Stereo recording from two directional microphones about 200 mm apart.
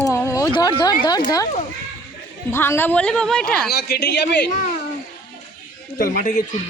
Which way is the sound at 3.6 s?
55° left (ahead or behind).